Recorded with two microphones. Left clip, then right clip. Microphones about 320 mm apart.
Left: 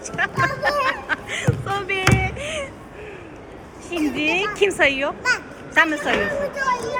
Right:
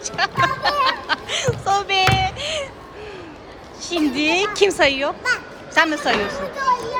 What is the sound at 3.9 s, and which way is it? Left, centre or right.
A woman's voice, centre.